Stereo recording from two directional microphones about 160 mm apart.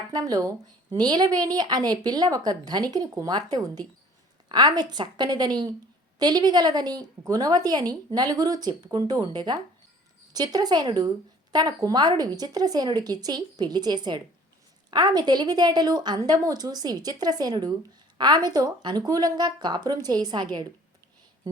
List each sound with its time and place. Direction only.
0.1 s a woman's voice: 25° right (ahead or behind)